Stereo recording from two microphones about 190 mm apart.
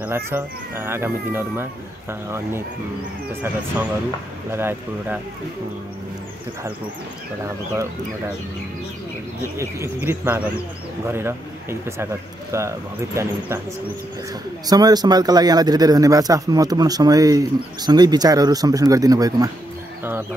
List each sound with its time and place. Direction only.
0.0 s speech: 10° right (ahead or behind)
4.5 s speech: 10° right (ahead or behind)
7.4 s speech: 15° right (ahead or behind)
9.6 s speech: 15° right (ahead or behind)
14.7 s a man's voice: 20° right (ahead or behind)